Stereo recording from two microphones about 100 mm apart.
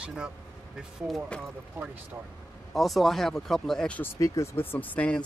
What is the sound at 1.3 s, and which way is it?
Speech, 20° right (ahead or behind).